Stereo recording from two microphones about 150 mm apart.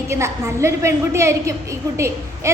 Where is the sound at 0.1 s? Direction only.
20° right (ahead or behind).